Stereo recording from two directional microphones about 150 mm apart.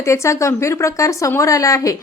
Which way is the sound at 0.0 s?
20° left (ahead or behind).